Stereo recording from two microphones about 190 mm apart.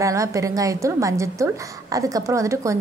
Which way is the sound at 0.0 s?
15° right (ahead or behind).